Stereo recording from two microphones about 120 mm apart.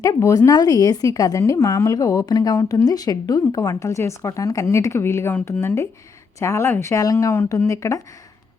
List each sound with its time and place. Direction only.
0.0 s a woman's voice: 30° left (ahead or behind)